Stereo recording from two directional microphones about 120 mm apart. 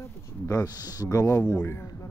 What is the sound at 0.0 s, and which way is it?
Speech, 30° left (ahead or behind).